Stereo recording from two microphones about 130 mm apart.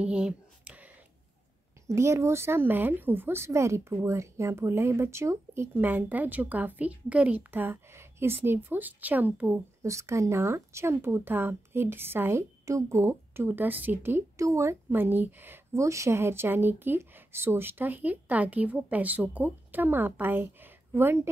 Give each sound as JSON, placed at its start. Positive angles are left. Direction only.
{"t": 0.0, "sound": "whispering", "side_deg": -10}
{"t": 1.9, "sound": "a woman's voice", "side_deg": -20}